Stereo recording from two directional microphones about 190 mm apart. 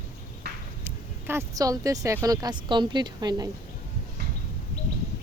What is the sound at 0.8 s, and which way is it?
Speech, 10° right (ahead or behind).